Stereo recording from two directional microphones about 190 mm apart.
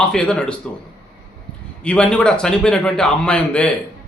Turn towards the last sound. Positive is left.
turn(degrees=5)  # may be behind; listen again after turning